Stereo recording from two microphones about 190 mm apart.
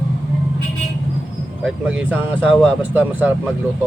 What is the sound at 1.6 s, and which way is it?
Speech, 5° right (ahead or behind).